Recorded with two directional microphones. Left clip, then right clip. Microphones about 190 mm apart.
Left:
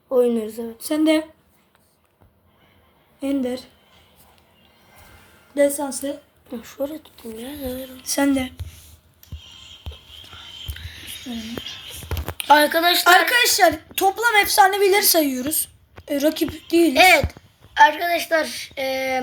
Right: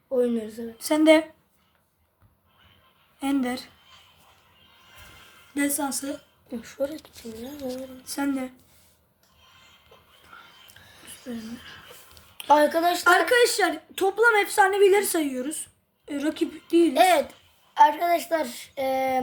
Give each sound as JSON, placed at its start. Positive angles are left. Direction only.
{"t": 0.1, "sound": "a woman's voice", "side_deg": 20}
{"t": 0.8, "sound": "speech", "side_deg": -15}
{"t": 3.2, "sound": "a woman's voice", "side_deg": -20}
{"t": 5.5, "sound": "a woman's voice", "side_deg": -30}
{"t": 6.5, "sound": "a woman's voice", "side_deg": 0}
{"t": 8.0, "sound": "a woman's voice", "side_deg": 35}
{"t": 10.8, "sound": "a sound", "side_deg": 0}
{"t": 12.4, "sound": "a woman's voice", "side_deg": 0}
{"t": 13.2, "sound": "a woman's voice", "side_deg": 25}
{"t": 16.9, "sound": "a woman's voice", "side_deg": 0}